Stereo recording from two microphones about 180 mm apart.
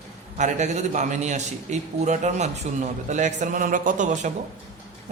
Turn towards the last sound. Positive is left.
turn(degrees=-45)  # may be behind; listen again after turning